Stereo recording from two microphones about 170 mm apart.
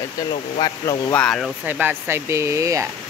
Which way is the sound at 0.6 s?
20° left (ahead or behind).